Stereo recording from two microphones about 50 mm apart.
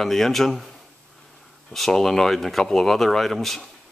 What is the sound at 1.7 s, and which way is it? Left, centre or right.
Speech, centre.